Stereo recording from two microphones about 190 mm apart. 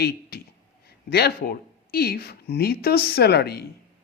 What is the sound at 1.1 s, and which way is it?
Speech, 55° left (ahead or behind).